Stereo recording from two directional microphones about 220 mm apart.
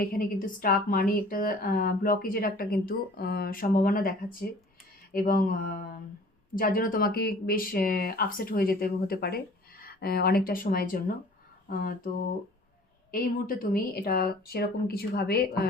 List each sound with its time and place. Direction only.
0.0 s speech: 40° left (ahead or behind)
13.1 s speech: 40° left (ahead or behind)